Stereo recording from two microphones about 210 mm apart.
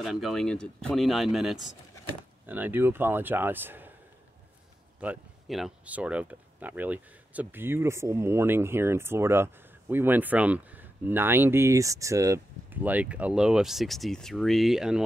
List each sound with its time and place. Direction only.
0.0 s speech: centre (ahead or behind)
5.0 s speech: 5° right (ahead or behind)